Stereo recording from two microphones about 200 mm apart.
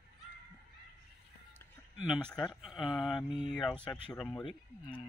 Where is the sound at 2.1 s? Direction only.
5° left (ahead or behind).